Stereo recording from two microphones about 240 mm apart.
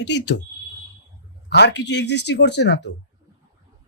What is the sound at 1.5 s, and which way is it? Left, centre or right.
Speech, left.